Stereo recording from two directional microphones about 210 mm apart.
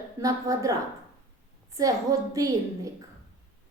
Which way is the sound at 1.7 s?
15° right (ahead or behind).